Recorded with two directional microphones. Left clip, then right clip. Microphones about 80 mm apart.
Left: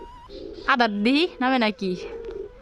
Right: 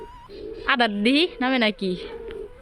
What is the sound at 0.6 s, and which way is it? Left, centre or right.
Speech, left.